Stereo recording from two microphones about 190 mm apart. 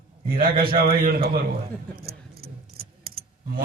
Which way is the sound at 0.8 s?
50° right (ahead or behind).